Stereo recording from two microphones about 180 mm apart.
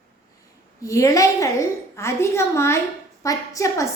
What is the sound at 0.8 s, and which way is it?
A woman's voice, 15° left (ahead or behind).